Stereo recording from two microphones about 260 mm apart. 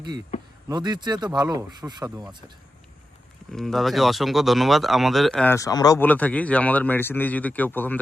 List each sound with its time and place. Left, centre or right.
0.3 s a sound: left
0.7 s speech: centre
3.5 s speech: centre